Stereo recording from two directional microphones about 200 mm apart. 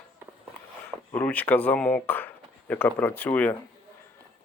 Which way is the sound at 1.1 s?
10° left (ahead or behind).